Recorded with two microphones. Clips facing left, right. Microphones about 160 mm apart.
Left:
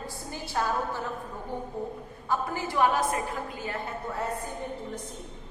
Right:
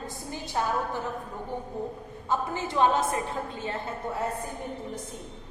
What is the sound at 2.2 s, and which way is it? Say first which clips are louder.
A woman's voice: right 1 dB; 20° right (ahead or behind).